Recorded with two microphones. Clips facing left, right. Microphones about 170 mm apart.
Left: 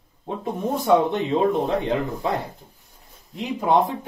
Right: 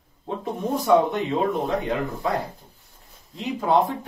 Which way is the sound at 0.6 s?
25° left (ahead or behind).